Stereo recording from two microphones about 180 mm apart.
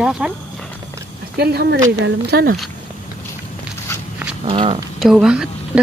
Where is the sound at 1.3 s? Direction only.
65° right (ahead or behind).